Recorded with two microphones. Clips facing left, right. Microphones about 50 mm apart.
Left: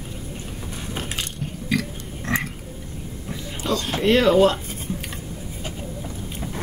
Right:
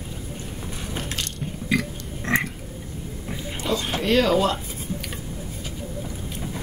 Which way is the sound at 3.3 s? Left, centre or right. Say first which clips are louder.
Left 1 dB; centre.